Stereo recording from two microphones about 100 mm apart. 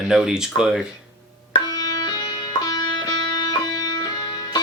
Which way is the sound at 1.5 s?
45° left (ahead or behind).